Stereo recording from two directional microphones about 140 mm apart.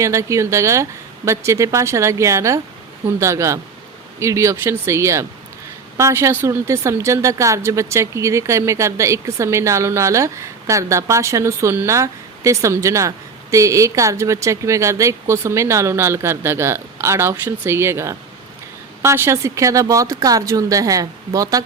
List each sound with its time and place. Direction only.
0.0 s a woman's voice: 20° right (ahead or behind)